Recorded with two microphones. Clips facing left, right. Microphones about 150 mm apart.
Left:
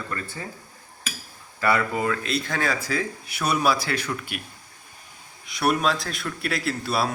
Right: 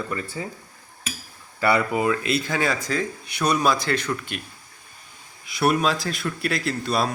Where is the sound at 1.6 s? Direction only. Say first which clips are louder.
Right 2 dB; 15° right (ahead or behind).